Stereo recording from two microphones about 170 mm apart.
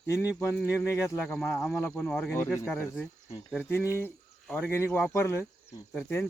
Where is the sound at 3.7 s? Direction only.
15° left (ahead or behind).